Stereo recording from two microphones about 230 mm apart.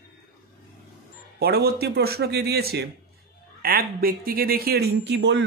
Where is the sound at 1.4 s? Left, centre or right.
Right.